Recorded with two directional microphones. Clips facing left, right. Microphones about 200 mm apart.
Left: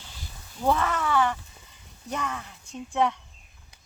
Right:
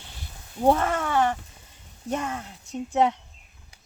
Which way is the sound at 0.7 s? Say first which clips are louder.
Right 2 dB; 45° right (ahead or behind).